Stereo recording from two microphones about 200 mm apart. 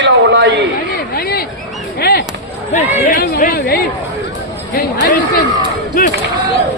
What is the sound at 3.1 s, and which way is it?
Chatter, 45° left (ahead or behind).